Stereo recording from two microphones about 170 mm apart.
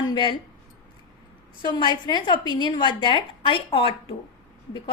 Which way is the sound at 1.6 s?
25° left (ahead or behind).